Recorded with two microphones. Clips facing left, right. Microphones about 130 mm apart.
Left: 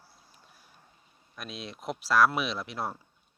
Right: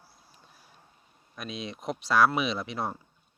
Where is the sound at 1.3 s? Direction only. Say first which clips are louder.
Right 4 dB; centre (ahead or behind).